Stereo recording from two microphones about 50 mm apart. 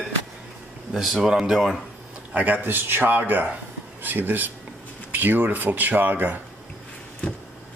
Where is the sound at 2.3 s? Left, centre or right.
Right.